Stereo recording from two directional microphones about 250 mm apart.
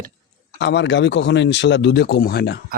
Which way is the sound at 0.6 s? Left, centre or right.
Left.